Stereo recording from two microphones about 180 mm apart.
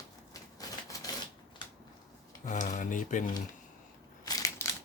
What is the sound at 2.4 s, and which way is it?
Speech, 45° left (ahead or behind).